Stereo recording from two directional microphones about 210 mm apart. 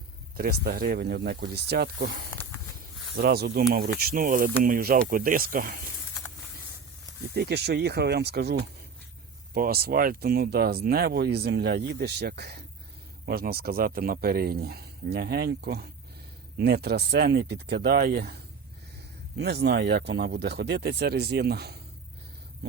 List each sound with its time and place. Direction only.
0.3 s speech: 45° right (ahead or behind)
7.3 s speech: 50° right (ahead or behind)